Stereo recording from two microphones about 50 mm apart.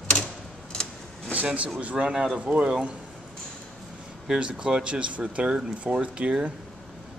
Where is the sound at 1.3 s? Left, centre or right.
Right.